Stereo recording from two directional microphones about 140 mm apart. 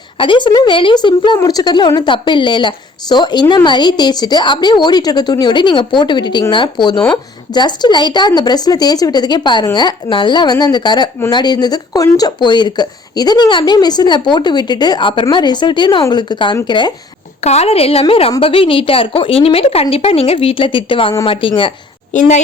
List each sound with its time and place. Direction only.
0.2 s speech: 35° left (ahead or behind)
17.4 s a woman's voice: 50° left (ahead or behind)
22.1 s a child's voice: 60° left (ahead or behind)